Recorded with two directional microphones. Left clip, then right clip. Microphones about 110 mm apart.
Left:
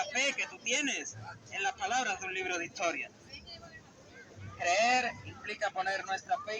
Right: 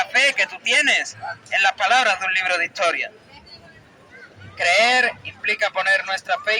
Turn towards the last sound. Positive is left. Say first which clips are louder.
# right 12 dB
turn(degrees=-25)  # may be behind; listen again after turning